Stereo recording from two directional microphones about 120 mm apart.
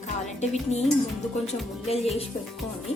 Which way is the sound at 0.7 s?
70° left (ahead or behind).